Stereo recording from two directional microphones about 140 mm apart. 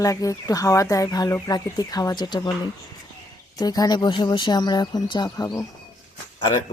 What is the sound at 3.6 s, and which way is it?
Speech, 30° left (ahead or behind).